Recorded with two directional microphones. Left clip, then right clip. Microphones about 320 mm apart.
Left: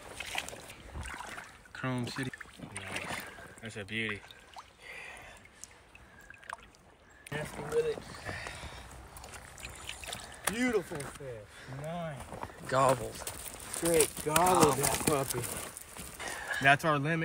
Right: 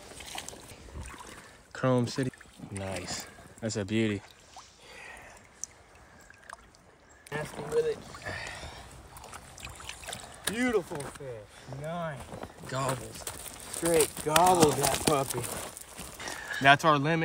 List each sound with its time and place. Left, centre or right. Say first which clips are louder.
0.2 s boat: left 4 dB; centre
1.7 s rowboat: right 9 dB; centre
4.9 s a sound: right 1 dB; centre
7.2 s a sound: right 2 dB; centre
9.8 s speech: even; centre
16.6 s speech: right 5 dB; centre